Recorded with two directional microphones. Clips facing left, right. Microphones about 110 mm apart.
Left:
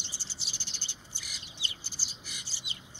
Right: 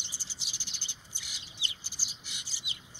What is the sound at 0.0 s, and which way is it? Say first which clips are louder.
Bird: left 2 dB; 15° right (ahead or behind).